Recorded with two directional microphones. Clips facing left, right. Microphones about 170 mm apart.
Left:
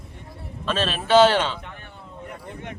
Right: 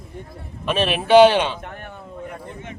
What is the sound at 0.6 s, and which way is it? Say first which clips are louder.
A man's voice: right 4 dB; 15° right (ahead or behind).